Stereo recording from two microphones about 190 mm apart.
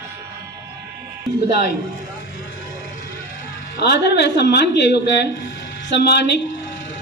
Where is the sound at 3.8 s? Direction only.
60° left (ahead or behind).